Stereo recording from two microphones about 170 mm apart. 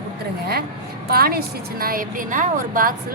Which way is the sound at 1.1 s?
65° right (ahead or behind).